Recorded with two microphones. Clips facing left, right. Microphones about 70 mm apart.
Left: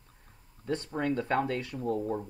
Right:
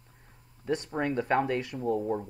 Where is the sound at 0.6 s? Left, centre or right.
Right.